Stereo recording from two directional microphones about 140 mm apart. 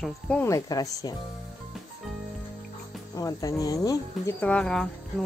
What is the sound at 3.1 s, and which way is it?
Speech, 25° left (ahead or behind).